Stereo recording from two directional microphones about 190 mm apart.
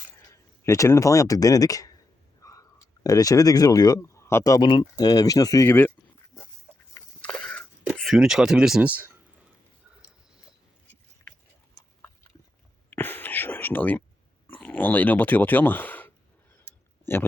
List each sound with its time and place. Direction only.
0.3 s speech: 15° left (ahead or behind)
7.2 s a sound: 5° left (ahead or behind)
7.9 s speech: centre (ahead or behind)
12.9 s whispering: 10° left (ahead or behind)
14.6 s speech: 10° left (ahead or behind)